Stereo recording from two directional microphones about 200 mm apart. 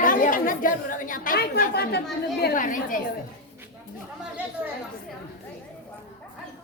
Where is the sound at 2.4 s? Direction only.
40° left (ahead or behind).